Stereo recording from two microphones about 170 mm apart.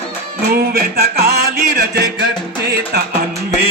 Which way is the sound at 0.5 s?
65° right (ahead or behind).